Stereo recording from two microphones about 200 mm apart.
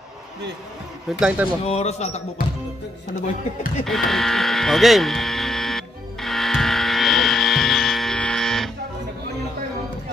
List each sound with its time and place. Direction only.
1.2 s speech: 5° right (ahead or behind)
1.6 s speech: 35° left (ahead or behind)
3.8 s a sound: centre (ahead or behind)